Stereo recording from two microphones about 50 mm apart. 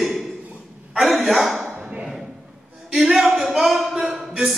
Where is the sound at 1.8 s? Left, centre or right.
Right.